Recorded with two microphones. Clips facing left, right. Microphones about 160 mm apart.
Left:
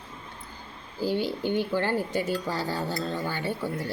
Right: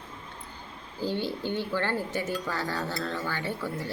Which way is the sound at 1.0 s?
10° left (ahead or behind).